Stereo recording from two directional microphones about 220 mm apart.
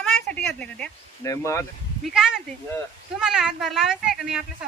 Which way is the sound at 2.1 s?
5° right (ahead or behind).